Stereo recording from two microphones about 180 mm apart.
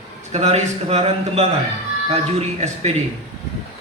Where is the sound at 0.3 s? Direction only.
35° right (ahead or behind).